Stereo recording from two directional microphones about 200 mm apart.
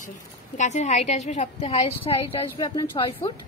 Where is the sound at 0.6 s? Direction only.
35° left (ahead or behind).